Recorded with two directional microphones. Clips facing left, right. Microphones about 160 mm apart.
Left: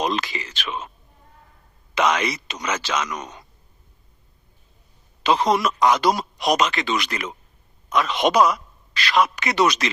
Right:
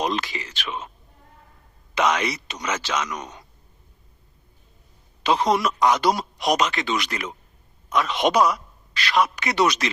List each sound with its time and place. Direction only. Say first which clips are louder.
0.0 s speech: left 1 dB; 90° left
2.0 s speech: left 1 dB; 90° left
5.2 s a man's voice: left 1 dB; 90° left